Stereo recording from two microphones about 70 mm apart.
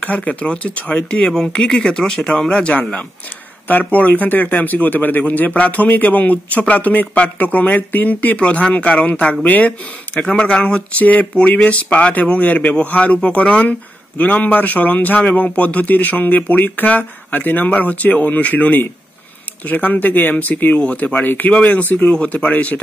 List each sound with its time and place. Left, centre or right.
0.0 s speech: centre